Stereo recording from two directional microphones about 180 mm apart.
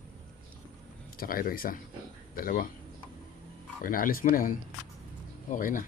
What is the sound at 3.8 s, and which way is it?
Speech, 50° left (ahead or behind).